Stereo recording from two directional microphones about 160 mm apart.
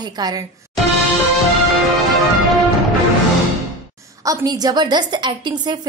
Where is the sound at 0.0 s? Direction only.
25° right (ahead or behind).